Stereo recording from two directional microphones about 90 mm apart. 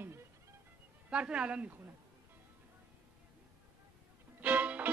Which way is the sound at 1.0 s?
10° right (ahead or behind).